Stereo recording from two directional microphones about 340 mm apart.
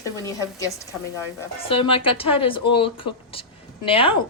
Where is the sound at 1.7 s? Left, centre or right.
Centre.